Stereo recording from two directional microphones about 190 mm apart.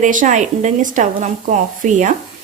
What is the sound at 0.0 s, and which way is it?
Speech, 40° right (ahead or behind).